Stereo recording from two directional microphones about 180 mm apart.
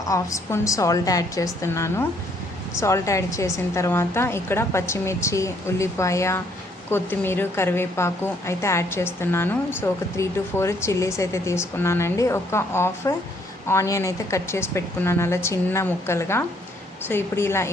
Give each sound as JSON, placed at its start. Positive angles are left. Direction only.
{"t": 0.1, "sound": "a woman's voice", "side_deg": 15}